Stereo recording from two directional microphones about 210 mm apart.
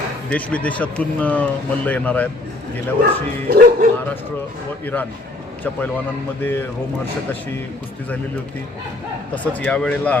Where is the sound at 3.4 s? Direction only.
45° right (ahead or behind).